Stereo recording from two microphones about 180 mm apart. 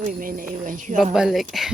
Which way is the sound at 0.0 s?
50° right (ahead or behind).